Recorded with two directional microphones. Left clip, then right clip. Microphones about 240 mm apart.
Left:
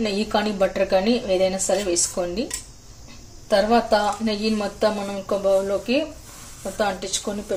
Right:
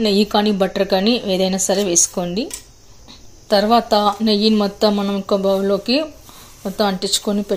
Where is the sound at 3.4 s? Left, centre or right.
Right.